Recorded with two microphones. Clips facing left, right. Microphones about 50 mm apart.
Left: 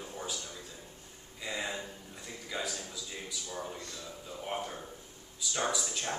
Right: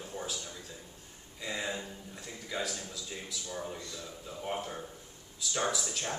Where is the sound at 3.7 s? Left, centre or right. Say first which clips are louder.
Right 1 dB; left.